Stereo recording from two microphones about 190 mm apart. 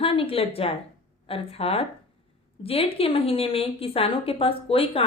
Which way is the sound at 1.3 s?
30° left (ahead or behind).